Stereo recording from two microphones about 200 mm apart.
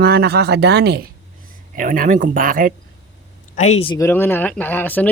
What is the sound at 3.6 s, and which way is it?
Speech, 35° left (ahead or behind).